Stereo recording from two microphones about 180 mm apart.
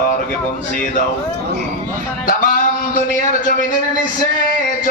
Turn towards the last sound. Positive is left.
turn(degrees=45)  # may be behind; listen again after turning